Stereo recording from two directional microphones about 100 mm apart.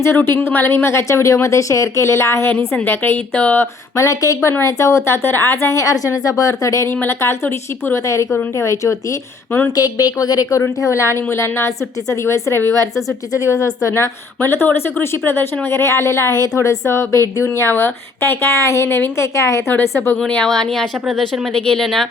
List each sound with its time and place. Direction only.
0.0 s a woman's voice: 25° left (ahead or behind)
3.9 s a woman's voice: 35° left (ahead or behind)
9.7 s a woman's voice: 40° left (ahead or behind)
20.2 s speech: 10° left (ahead or behind)